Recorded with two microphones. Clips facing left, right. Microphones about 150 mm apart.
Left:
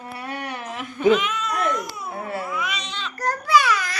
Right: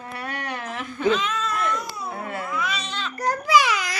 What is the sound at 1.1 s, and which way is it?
Speech, centre (ahead or behind).